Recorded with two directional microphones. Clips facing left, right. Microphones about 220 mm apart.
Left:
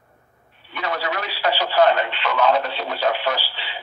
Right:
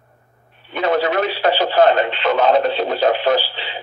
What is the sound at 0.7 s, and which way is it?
Speech, 25° right (ahead or behind).